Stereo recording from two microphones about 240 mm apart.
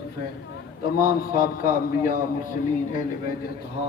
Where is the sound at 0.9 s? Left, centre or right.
Left.